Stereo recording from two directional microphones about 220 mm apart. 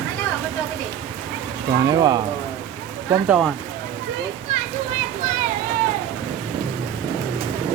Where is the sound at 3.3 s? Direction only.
5° right (ahead or behind).